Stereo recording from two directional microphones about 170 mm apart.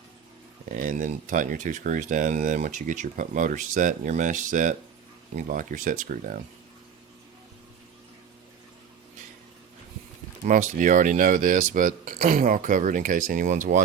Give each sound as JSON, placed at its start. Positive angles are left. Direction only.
{"t": 0.7, "sound": "speech", "side_deg": -50}
{"t": 10.4, "sound": "speech", "side_deg": -50}